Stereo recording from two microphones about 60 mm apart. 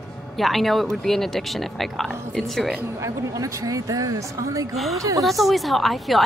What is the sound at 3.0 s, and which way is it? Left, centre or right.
Speech, right.